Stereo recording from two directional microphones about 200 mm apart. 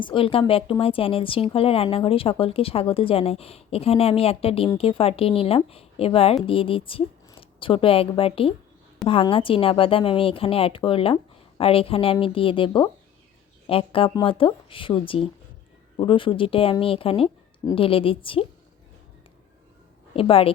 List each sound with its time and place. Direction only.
0.0 s a woman's voice: 25° left (ahead or behind)
20.1 s a woman's voice: 30° left (ahead or behind)